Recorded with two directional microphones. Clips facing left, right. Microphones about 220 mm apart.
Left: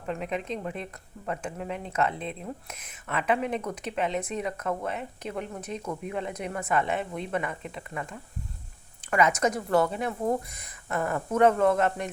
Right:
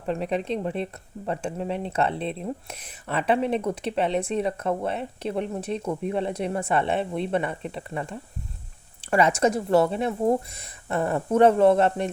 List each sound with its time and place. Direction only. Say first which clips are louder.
0.0 s speech: right 5 dB; 30° right (ahead or behind)